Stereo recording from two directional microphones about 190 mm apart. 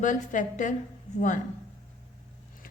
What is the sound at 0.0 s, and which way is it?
Speech, 40° left (ahead or behind).